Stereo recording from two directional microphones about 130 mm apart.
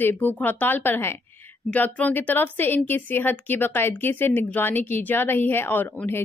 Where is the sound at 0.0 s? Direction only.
15° left (ahead or behind).